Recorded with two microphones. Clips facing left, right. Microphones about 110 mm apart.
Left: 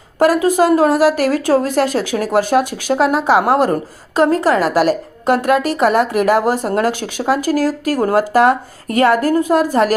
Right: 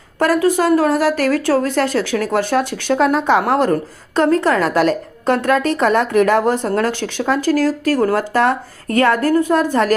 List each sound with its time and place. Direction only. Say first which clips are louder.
0.2 s a woman's voice: left 2 dB; 15° left (ahead or behind)